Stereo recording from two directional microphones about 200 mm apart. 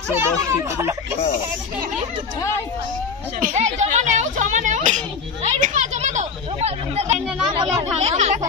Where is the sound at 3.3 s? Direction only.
40° right (ahead or behind).